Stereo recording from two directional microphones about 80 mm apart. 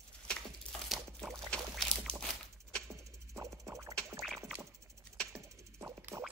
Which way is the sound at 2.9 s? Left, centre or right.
Right.